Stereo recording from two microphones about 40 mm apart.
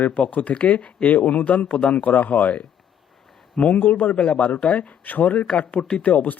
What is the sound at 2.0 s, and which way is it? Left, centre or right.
Speech, left.